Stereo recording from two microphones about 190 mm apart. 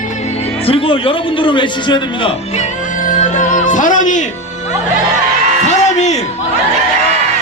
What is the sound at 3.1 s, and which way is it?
Music, 40° left (ahead or behind).